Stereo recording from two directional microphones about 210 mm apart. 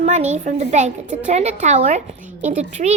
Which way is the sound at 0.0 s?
35° right (ahead or behind).